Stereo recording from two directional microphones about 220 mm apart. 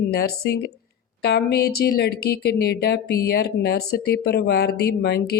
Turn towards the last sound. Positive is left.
turn(degrees=45)  # may be behind; listen again after turning